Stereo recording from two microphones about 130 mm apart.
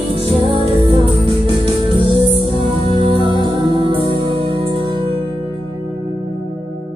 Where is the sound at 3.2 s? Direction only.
35° right (ahead or behind).